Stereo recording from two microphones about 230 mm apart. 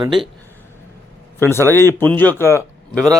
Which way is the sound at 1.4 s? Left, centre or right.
Centre.